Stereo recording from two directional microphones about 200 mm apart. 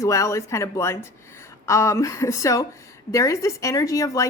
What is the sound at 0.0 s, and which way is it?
A woman's voice, 15° left (ahead or behind).